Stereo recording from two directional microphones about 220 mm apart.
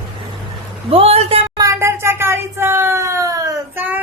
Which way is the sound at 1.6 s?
10° right (ahead or behind).